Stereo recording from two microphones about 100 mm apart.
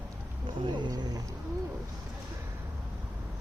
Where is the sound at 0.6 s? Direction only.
50° right (ahead or behind).